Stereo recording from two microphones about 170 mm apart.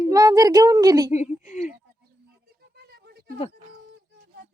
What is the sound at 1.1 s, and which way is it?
Speech, 45° left (ahead or behind).